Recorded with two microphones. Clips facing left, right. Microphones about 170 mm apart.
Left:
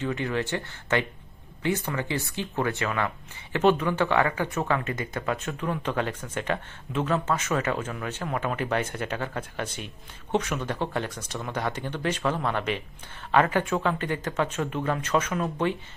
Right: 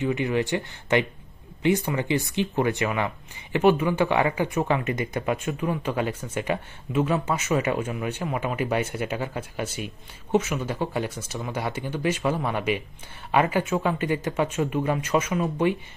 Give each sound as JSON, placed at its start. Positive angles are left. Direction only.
{"t": 0.0, "sound": "speech", "side_deg": -15}